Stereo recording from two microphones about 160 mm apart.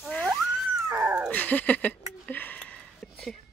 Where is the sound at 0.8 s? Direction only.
15° right (ahead or behind).